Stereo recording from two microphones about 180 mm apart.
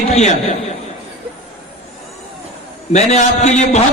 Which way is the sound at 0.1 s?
35° left (ahead or behind).